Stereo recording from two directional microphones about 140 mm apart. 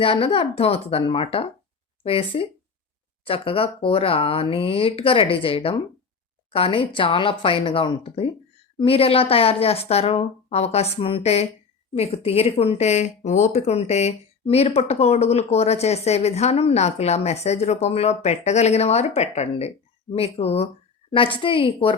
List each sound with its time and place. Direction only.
0.0 s speech: 40° left (ahead or behind)